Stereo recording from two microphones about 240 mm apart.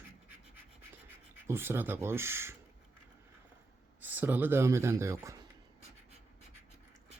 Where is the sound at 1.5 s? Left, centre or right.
Centre.